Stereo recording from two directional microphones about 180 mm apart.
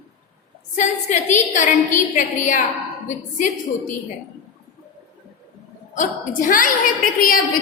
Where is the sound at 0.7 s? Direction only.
40° left (ahead or behind).